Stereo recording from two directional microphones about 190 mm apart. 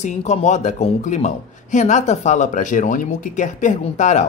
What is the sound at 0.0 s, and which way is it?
Speech, 35° left (ahead or behind).